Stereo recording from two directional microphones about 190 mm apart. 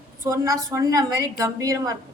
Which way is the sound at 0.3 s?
15° right (ahead or behind).